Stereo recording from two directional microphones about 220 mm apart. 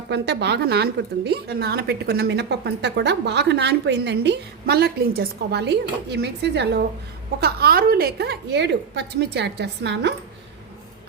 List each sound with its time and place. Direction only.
0.1 s a woman's voice: 50° right (ahead or behind)